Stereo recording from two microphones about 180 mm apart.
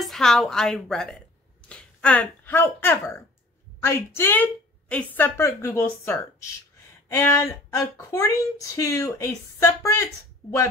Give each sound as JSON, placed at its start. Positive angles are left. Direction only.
{"t": 0.0, "sound": "a woman's voice", "side_deg": 0}